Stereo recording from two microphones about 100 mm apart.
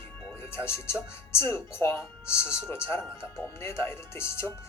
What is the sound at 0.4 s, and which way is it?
Speech, 25° left (ahead or behind).